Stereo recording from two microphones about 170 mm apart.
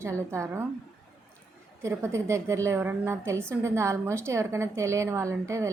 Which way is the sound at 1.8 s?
15° right (ahead or behind).